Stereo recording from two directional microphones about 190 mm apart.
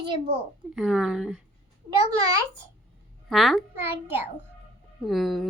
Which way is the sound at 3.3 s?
Centre (ahead or behind).